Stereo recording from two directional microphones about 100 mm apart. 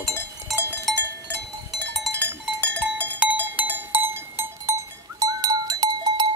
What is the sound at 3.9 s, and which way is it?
Goat, 20° right (ahead or behind).